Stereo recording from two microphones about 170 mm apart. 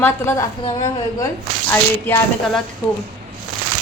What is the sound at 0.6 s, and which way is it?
Speech, 25° left (ahead or behind).